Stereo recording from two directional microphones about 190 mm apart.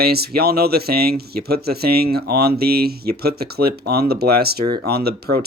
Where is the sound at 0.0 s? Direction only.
55° right (ahead or behind).